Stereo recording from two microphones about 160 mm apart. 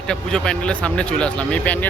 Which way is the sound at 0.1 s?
5° left (ahead or behind).